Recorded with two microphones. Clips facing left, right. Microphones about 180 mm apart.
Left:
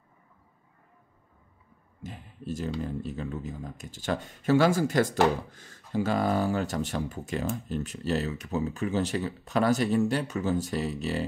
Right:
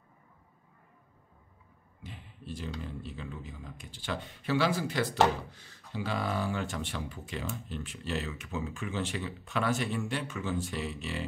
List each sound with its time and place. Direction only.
2.0 s speech: 45° left (ahead or behind)